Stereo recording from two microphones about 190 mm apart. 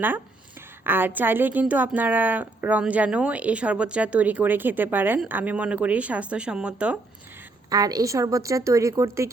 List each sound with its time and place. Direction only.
0.9 s a woman's voice: 10° right (ahead or behind)
7.7 s a woman's voice: 20° right (ahead or behind)